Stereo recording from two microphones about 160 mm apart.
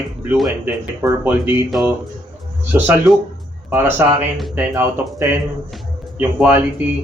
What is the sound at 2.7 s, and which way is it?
Speech, 5° right (ahead or behind).